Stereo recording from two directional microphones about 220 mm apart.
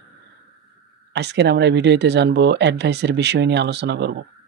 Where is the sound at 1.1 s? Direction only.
50° right (ahead or behind).